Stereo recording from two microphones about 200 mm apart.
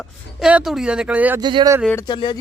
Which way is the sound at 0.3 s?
5° right (ahead or behind).